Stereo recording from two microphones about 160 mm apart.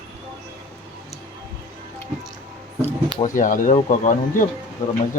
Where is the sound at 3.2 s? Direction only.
55° left (ahead or behind).